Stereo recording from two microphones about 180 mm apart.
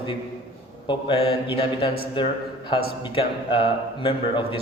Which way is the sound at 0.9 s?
30° left (ahead or behind).